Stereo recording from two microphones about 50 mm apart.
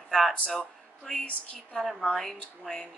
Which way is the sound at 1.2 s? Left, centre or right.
Left.